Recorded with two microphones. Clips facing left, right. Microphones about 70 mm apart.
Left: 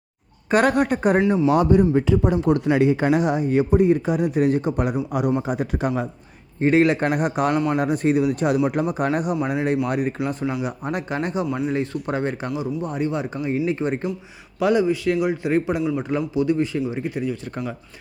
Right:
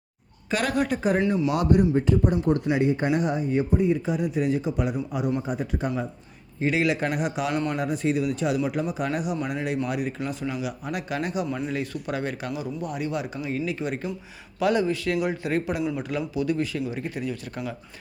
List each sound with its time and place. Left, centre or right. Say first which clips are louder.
0.5 s speech: left 7 dB; left
1.2 s a man's voice: left 4 dB; left
1.9 s speech: left 3 dB; left
5.4 s speech: left 4 dB; left
6.6 s speech: left 6 dB; left
11.4 s speech: left 5 dB; centre
11.7 s a man's voice: left 5 dB; left
14.6 s a man's voice: left 4 dB; left